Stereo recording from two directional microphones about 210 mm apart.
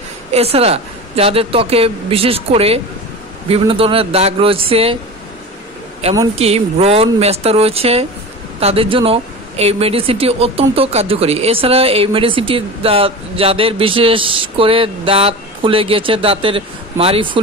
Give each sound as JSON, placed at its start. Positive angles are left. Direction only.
{"t": 0.3, "sound": "speech", "side_deg": -30}
{"t": 6.3, "sound": "speech", "side_deg": -30}